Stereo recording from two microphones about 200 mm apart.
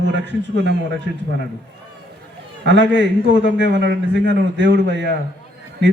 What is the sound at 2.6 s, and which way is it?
A man's voice, 65° right (ahead or behind).